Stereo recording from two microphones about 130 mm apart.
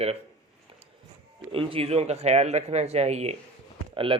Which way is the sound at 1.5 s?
45° right (ahead or behind).